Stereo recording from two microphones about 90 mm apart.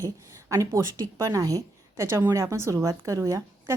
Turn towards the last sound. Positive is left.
turn(degrees=-35)  # may be behind; listen again after turning